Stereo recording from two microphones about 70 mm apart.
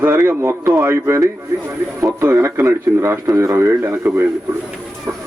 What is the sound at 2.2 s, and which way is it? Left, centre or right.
A man's voice, right.